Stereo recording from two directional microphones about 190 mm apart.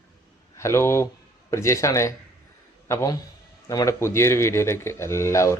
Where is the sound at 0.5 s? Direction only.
15° left (ahead or behind).